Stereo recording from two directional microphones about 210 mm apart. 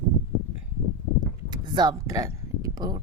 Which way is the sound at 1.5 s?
20° right (ahead or behind).